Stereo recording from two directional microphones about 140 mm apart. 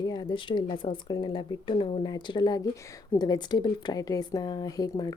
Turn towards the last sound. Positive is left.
turn(degrees=30)  # may be behind; listen again after turning